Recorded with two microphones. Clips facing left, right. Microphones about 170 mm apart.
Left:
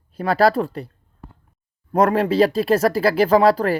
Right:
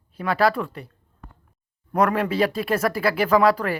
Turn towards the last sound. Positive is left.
turn(degrees=35)  # may be behind; listen again after turning